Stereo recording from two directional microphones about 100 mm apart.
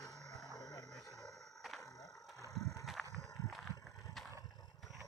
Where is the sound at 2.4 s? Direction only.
35° right (ahead or behind).